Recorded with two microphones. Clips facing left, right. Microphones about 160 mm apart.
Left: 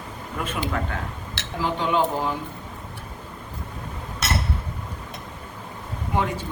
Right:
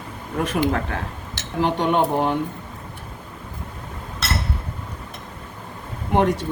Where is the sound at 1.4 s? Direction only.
65° right (ahead or behind).